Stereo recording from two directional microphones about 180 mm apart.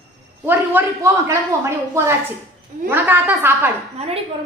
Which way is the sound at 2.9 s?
10° right (ahead or behind).